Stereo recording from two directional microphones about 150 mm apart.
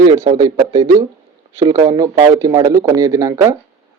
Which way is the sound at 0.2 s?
25° right (ahead or behind).